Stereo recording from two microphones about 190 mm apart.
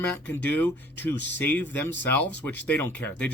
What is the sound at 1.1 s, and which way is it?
Speech, 65° left (ahead or behind).